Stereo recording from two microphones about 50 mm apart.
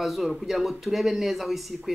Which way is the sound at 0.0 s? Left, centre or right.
Centre.